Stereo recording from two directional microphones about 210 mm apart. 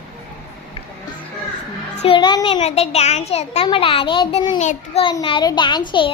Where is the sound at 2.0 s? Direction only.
25° left (ahead or behind).